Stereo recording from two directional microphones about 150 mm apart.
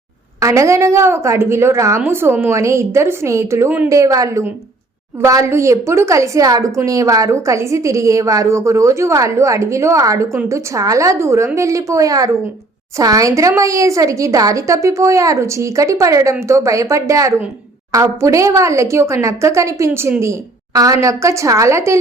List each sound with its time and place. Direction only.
0.3 s a woman's voice: 20° right (ahead or behind)